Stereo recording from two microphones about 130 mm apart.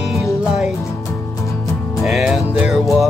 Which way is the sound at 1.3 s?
25° left (ahead or behind).